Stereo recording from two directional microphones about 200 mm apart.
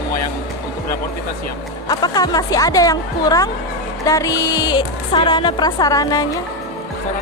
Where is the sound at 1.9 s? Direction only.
20° left (ahead or behind).